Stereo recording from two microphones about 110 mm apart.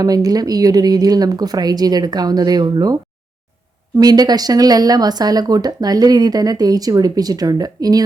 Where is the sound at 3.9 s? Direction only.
35° right (ahead or behind).